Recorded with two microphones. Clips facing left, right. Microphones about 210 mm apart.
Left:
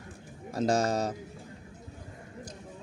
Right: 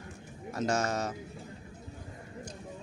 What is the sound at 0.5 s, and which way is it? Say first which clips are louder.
Speech: left 4 dB; 35° left (ahead or behind).